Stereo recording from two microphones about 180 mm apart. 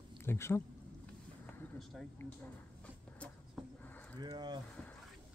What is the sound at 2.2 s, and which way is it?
Speech, 15° left (ahead or behind).